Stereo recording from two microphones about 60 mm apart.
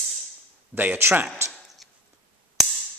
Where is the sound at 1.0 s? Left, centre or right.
Right.